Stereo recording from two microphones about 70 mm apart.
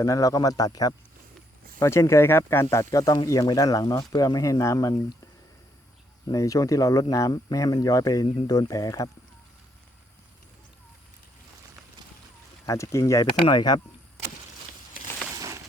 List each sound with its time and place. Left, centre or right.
0.0 s speech: left
1.8 s speech: left
3.0 s speech: left
6.3 s speech: left
12.6 s speech: left
13.5 s speech: left
15.4 s a sound: right